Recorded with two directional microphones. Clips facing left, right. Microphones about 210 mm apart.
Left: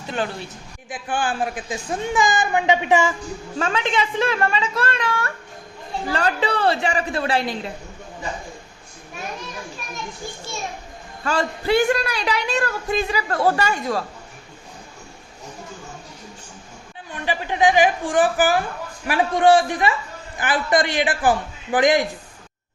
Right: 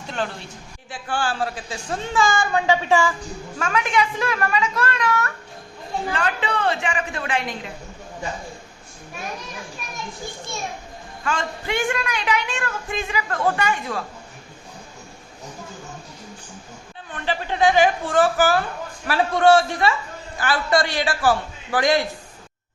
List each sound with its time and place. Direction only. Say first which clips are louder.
0.9 s a woman's voice: left 1 dB; 15° left (ahead or behind); by 7.7 s 35° left (ahead or behind)
11.2 s a woman's voice: left 4 dB; 35° left (ahead or behind)
17.1 s a woman's voice: left 1 dB; 15° left (ahead or behind)